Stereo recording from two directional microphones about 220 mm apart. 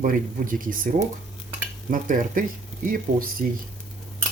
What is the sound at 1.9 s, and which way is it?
Speech, 35° right (ahead or behind).